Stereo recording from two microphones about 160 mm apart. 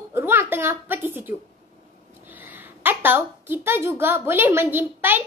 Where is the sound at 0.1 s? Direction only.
15° right (ahead or behind).